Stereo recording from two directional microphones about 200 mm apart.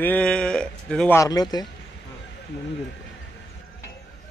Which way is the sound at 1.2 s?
20° left (ahead or behind).